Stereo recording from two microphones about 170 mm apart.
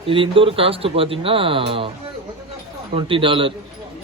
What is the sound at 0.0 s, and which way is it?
Speech, 30° right (ahead or behind).